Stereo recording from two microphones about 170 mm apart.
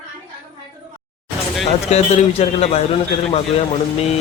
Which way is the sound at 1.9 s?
40° left (ahead or behind).